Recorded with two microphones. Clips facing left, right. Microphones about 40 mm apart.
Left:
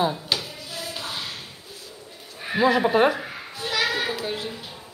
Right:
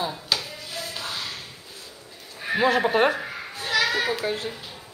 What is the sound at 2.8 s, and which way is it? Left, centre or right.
Speech, centre.